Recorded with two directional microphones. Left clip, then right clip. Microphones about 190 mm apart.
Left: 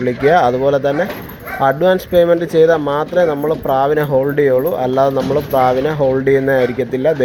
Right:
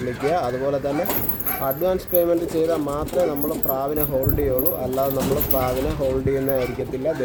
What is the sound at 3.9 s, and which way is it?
Speech, 5° left (ahead or behind).